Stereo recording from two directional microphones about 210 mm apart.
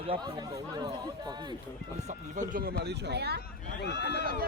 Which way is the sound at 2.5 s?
45° right (ahead or behind).